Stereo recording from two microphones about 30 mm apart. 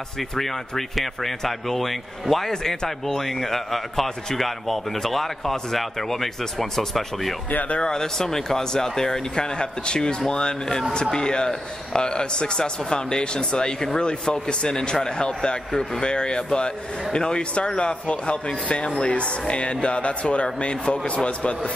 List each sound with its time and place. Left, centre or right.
0.4 s speech: centre
2.5 s a man's voice: centre; by 20.4 s left
21.2 s a man's voice: left